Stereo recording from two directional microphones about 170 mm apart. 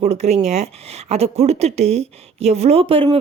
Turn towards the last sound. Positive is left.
turn(degrees=-30)  # may be behind; listen again after turning